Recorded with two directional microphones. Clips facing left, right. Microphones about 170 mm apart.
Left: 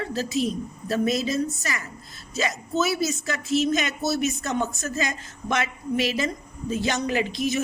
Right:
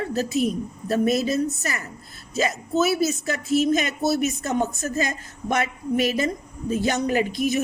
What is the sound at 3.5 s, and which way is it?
Speech, 50° right (ahead or behind).